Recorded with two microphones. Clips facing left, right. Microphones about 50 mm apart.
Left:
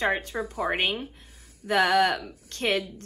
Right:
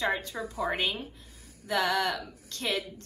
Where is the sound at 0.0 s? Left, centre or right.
Left.